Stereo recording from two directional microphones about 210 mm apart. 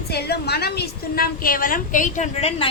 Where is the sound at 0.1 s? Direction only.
50° left (ahead or behind).